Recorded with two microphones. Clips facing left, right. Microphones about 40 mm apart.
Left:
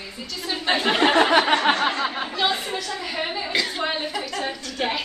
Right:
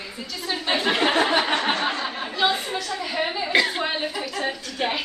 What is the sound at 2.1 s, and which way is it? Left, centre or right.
Speech, left.